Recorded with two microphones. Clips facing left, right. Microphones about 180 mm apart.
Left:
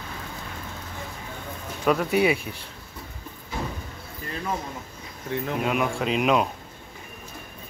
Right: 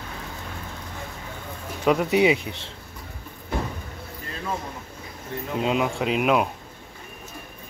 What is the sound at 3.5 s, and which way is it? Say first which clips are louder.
Vehicle: right 3 dB; 55° right (ahead or behind).